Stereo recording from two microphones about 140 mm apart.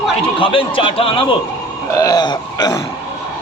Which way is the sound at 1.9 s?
25° left (ahead or behind).